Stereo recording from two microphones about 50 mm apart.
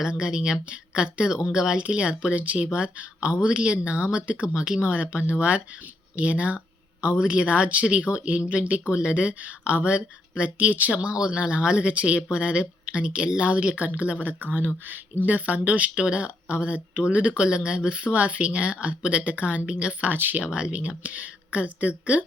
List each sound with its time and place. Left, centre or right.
0.0 s speech: centre
20.1 s speech: right
20.4 s speech: right